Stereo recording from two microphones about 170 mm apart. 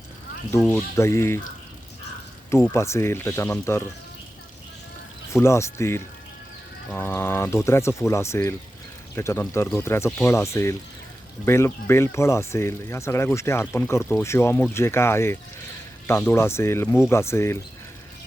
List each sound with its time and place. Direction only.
0.7 s speech: 15° left (ahead or behind)
2.5 s speech: 15° left (ahead or behind)
5.3 s speech: 15° left (ahead or behind)